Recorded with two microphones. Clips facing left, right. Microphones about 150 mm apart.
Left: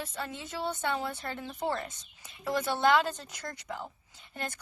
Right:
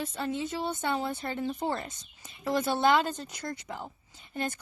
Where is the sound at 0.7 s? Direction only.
20° right (ahead or behind).